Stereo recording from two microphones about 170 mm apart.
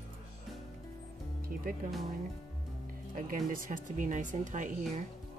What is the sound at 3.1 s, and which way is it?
Speech, 55° right (ahead or behind).